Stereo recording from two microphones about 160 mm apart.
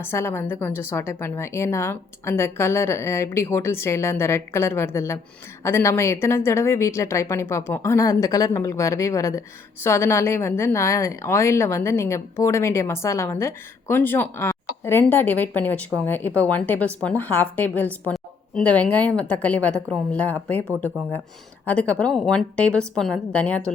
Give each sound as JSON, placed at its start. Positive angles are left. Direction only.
{"t": 0.0, "sound": "a woman's voice", "side_deg": 15}
{"t": 21.7, "sound": "a woman's voice", "side_deg": 10}